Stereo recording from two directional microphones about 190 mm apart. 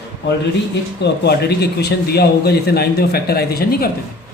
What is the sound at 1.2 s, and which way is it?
Speech, 60° left (ahead or behind).